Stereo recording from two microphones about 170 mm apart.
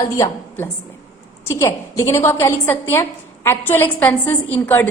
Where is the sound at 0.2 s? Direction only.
10° left (ahead or behind).